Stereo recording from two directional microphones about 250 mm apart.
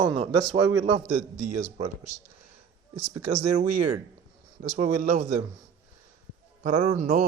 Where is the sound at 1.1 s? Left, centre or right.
Right.